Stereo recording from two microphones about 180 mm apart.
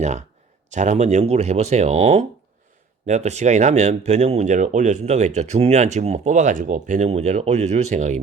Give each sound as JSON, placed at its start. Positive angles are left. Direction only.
{"t": 0.0, "sound": "speech", "side_deg": -40}